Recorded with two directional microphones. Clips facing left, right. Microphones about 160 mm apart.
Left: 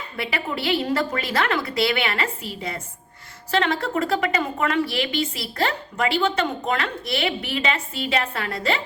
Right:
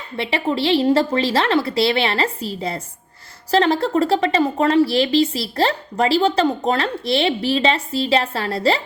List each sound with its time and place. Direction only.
0.2 s a woman's voice: 30° right (ahead or behind)